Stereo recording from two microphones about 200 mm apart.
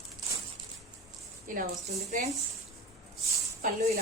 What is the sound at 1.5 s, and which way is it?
Speech, 45° right (ahead or behind).